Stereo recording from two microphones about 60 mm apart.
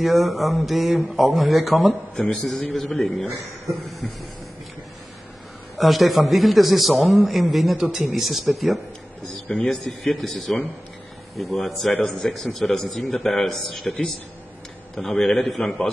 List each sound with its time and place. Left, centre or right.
0.0 s a man's voice: centre
5.8 s a man's voice: centre